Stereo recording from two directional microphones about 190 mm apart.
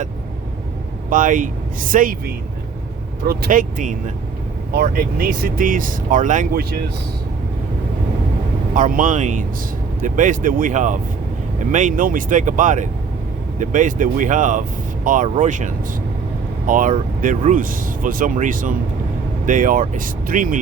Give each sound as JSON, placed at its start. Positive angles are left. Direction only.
{"t": 1.1, "sound": "speech", "side_deg": -45}
{"t": 8.7, "sound": "speech", "side_deg": -45}